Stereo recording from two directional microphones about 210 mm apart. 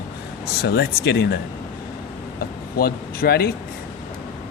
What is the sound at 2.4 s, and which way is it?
Speech, 45° left (ahead or behind).